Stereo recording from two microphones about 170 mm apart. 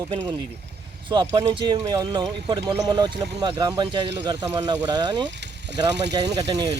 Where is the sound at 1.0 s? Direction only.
30° right (ahead or behind).